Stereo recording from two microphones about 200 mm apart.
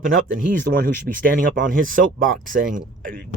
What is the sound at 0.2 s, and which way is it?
Speech, 45° right (ahead or behind).